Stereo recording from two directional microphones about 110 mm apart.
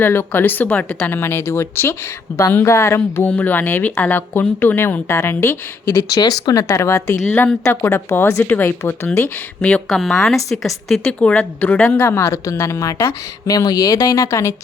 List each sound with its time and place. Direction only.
0.0 s a woman's voice: 20° left (ahead or behind)
3.2 s speech: 15° left (ahead or behind)
6.1 s a woman's voice: 35° left (ahead or behind); by 10.7 s centre (ahead or behind)
11.0 s speech: 10° left (ahead or behind)
12.0 s a woman's voice: 25° left (ahead or behind)